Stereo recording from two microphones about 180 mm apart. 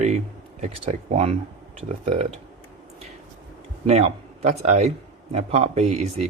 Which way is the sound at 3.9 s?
40° right (ahead or behind).